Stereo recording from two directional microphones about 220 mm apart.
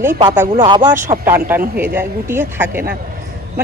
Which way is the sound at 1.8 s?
10° right (ahead or behind).